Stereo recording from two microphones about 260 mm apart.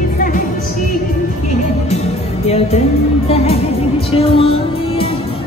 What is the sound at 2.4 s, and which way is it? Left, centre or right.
Speech, left.